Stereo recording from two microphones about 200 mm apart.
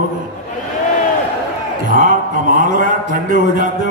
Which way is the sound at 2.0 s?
40° right (ahead or behind).